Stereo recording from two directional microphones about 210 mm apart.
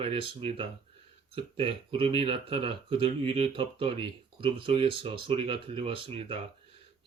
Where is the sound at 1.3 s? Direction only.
25° right (ahead or behind).